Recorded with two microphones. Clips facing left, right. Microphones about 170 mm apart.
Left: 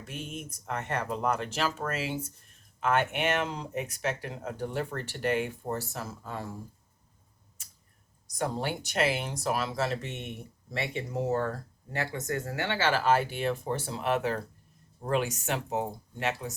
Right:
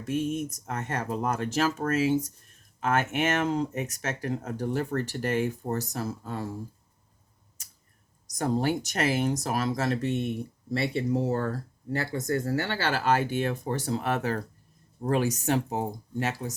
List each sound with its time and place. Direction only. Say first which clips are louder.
0.0 s speech: right 11 dB; 40° right (ahead or behind)
8.3 s speech: right 5 dB; 40° right (ahead or behind)